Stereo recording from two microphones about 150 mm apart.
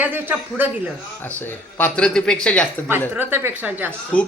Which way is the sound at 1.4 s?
10° left (ahead or behind).